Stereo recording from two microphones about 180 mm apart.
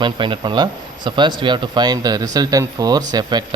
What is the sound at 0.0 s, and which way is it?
A man's voice, 25° right (ahead or behind).